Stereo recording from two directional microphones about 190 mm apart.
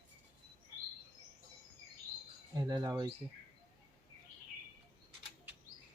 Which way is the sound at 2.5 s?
20° right (ahead or behind).